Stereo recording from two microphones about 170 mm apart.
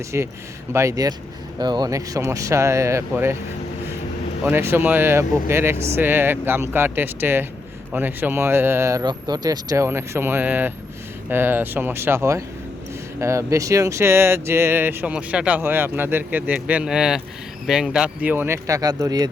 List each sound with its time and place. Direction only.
0.1 s speech: 15° right (ahead or behind)
4.4 s speech: 15° right (ahead or behind)